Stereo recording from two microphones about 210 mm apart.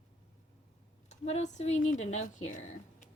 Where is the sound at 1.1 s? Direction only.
35° left (ahead or behind).